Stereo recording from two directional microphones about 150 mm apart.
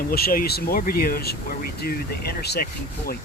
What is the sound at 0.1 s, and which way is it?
Speech, 80° left.